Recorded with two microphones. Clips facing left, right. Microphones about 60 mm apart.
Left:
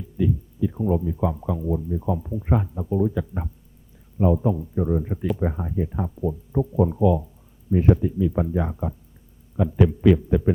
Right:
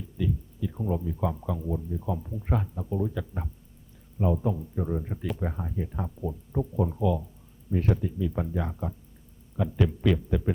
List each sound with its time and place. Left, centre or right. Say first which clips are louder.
0.2 s speech: left 7 dB; centre